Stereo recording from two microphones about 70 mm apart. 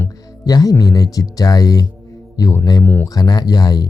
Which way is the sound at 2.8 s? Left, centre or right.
Left.